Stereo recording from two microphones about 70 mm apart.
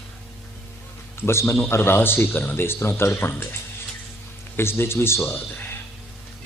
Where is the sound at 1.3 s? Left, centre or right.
Left.